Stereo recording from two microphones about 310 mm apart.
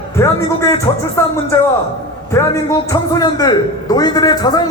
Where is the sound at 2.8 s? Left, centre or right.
Centre.